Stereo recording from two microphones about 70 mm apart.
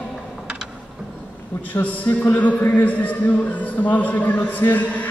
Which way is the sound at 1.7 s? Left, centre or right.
Left.